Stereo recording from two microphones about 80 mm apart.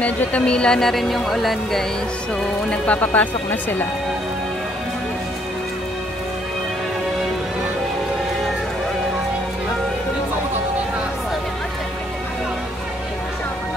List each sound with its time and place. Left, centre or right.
0.0 s speech: centre
2.7 s speech: centre